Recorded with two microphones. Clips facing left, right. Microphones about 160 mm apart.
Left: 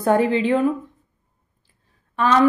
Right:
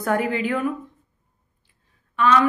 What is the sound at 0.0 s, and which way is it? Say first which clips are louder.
Speech: left 5 dB; 25° left (ahead or behind).